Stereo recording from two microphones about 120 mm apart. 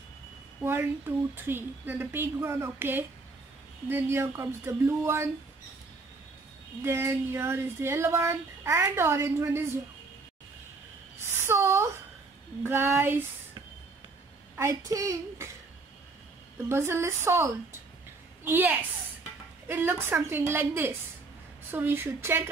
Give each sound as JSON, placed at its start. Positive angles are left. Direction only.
{"t": 0.6, "sound": "speech", "side_deg": -15}
{"t": 6.8, "sound": "speech", "side_deg": -20}
{"t": 11.2, "sound": "a sound", "side_deg": -20}
{"t": 12.6, "sound": "speech", "side_deg": -20}
{"t": 14.6, "sound": "speech", "side_deg": -25}
{"t": 16.6, "sound": "a woman's voice", "side_deg": -20}